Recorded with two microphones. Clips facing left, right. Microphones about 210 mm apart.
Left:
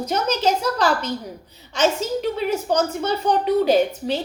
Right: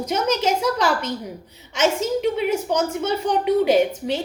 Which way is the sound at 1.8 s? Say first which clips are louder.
Even; 25° right (ahead or behind).